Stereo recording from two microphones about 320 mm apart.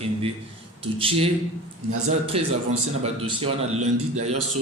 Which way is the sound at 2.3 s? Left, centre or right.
Centre.